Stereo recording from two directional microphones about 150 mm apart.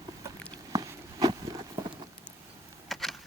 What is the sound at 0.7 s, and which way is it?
Horse, 25° right (ahead or behind).